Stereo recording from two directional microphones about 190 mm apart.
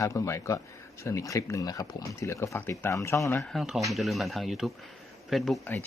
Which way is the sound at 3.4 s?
Centre (ahead or behind).